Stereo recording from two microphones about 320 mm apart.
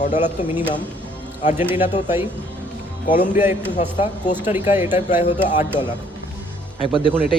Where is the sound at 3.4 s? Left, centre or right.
Centre.